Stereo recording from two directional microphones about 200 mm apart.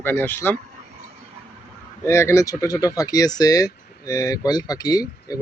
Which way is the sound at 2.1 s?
15° left (ahead or behind).